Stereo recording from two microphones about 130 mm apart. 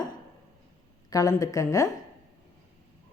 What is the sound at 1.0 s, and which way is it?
Speech, 30° left (ahead or behind).